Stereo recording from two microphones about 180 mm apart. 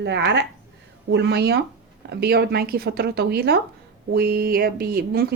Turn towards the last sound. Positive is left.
turn(degrees=-55)  # may be behind; listen again after turning